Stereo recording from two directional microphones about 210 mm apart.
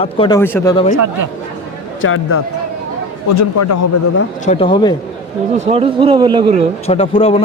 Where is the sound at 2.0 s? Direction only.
75° left (ahead or behind).